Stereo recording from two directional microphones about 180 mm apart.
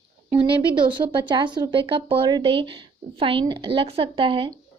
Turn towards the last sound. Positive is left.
turn(degrees=-30)  # may be behind; listen again after turning